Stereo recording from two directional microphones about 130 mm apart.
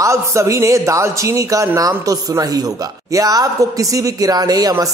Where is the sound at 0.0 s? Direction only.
25° right (ahead or behind).